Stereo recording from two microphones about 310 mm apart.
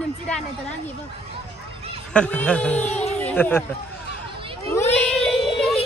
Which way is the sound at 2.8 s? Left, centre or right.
Left.